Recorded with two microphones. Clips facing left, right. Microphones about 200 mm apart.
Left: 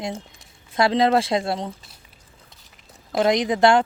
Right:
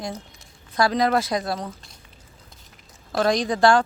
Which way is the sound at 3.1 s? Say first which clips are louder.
Left 2 dB; 20° left (ahead or behind).